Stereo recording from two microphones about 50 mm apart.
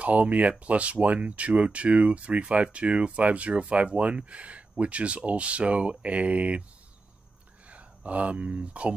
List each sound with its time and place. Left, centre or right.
0.0 s speech: right
7.6 s speech: right